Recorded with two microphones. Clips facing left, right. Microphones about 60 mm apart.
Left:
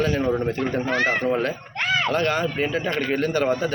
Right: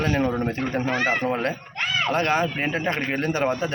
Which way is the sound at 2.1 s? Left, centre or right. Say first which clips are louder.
Even; right.